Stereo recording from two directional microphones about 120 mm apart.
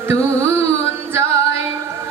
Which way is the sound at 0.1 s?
25° right (ahead or behind).